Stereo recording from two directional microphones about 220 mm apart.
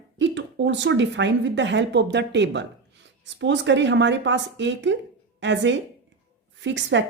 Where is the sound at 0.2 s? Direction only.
55° right (ahead or behind).